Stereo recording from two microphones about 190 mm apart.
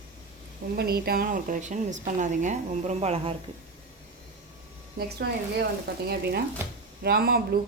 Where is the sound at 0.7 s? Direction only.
55° right (ahead or behind); by 3.4 s 30° right (ahead or behind).